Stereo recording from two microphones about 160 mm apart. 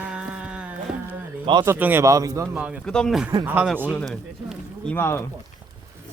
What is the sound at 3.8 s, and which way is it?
Speech, 5° left (ahead or behind).